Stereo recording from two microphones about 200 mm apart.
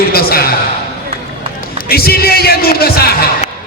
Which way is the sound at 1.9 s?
50° left (ahead or behind).